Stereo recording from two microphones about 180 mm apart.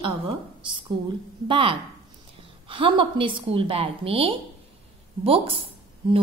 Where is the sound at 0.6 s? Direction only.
25° right (ahead or behind).